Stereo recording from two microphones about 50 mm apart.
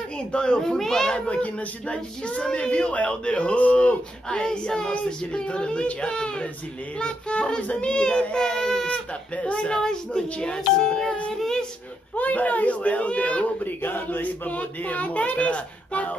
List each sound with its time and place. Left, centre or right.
0.3 s speech: centre
0.6 s speech: centre
7.8 s child singing: centre
8.8 s speech: left
9.8 s child singing: centre
11.3 s a sound: centre
12.2 s speech: left
13.8 s speech: left